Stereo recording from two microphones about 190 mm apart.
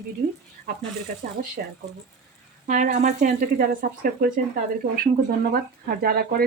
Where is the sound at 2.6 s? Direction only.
45° right (ahead or behind).